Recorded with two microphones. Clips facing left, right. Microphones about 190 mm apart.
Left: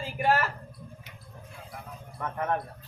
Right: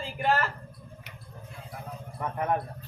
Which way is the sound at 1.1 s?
70° right (ahead or behind).